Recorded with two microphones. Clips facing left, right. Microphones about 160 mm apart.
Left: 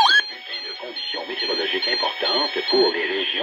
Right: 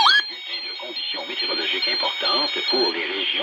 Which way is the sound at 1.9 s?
50° left (ahead or behind).